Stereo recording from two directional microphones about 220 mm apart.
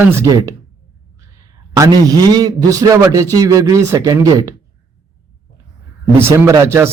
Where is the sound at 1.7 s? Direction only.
15° right (ahead or behind).